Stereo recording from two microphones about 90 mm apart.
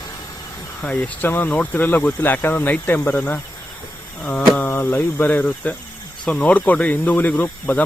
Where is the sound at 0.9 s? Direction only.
20° left (ahead or behind).